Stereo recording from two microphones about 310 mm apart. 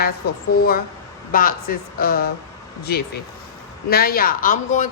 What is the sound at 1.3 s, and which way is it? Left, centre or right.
A woman's voice, left.